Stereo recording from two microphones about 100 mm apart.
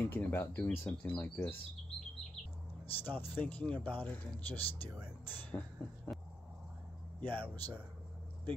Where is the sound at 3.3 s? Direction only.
15° left (ahead or behind).